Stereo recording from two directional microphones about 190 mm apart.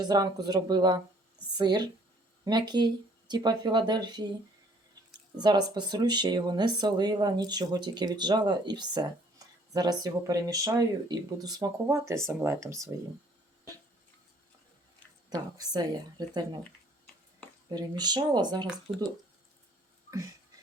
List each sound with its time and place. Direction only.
0.0 s speech: 20° right (ahead or behind)
5.4 s speech: 20° right (ahead or behind)
15.5 s speech: 20° right (ahead or behind)
17.7 s speech: 20° right (ahead or behind)